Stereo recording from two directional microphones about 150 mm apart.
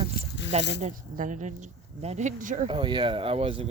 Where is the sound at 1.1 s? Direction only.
55° right (ahead or behind).